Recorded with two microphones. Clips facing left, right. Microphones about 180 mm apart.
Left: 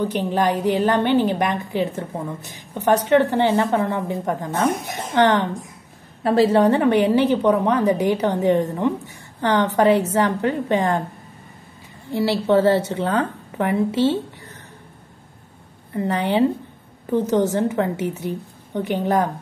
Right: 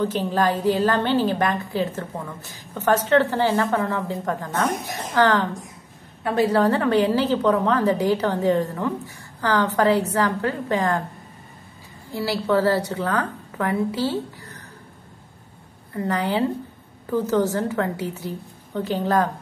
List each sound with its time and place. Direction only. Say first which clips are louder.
0.0 s a woman's voice: left 1 dB; 15° left (ahead or behind)
12.1 s a woman's voice: left 4 dB; 25° left (ahead or behind)
15.9 s a woman's voice: left 3 dB; 25° left (ahead or behind)